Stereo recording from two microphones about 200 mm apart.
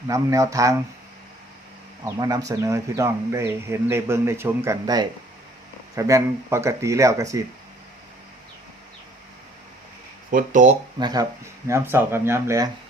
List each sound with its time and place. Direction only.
0.1 s speech: 15° right (ahead or behind)
2.0 s speech: 20° right (ahead or behind)
10.3 s speech: 40° right (ahead or behind)
11.0 s speech: 20° right (ahead or behind)